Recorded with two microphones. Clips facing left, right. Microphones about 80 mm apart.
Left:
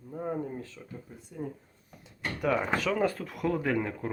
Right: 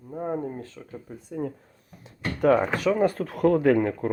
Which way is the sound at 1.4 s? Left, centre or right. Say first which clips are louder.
Right 6 dB; right.